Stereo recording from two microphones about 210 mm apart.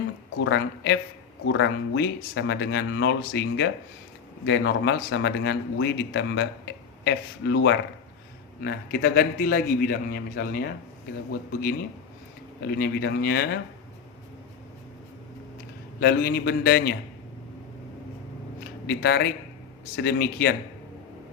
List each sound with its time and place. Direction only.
0.4 s a man's voice: 55° left (ahead or behind)
12.6 s a man's voice: 50° left (ahead or behind)
16.0 s a man's voice: 50° left (ahead or behind)
18.9 s a man's voice: 50° left (ahead or behind)